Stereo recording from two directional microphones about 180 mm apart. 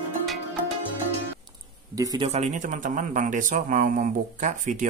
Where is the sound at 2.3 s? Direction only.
40° right (ahead or behind).